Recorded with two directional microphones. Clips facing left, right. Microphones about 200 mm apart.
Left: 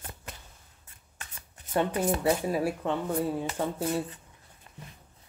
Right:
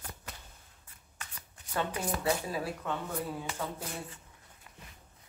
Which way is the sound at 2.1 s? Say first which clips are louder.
Left 6 dB; 25° left (ahead or behind).